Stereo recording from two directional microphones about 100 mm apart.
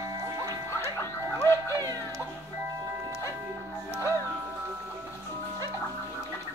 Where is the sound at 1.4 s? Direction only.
30° left (ahead or behind).